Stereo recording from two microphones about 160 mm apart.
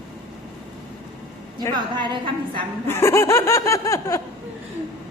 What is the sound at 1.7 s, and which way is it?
Speech, 30° right (ahead or behind).